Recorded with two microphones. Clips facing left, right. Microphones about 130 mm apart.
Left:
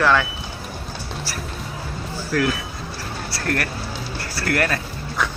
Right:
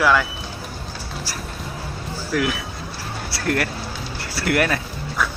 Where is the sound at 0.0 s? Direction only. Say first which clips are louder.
Even; 5° right (ahead or behind).